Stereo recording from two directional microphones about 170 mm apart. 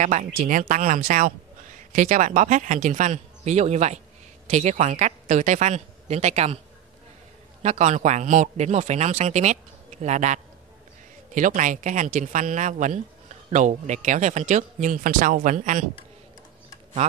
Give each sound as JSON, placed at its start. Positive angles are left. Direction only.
{"t": 0.0, "sound": "speech", "side_deg": -45}
{"t": 7.6, "sound": "speech", "side_deg": -40}